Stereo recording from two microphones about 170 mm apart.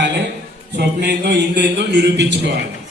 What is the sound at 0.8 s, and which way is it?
A man's voice, 75° right (ahead or behind).